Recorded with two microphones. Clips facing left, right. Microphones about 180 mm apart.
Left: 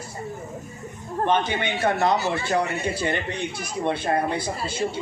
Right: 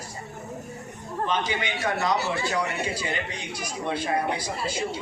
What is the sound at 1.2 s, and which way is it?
Speech, 55° left (ahead or behind).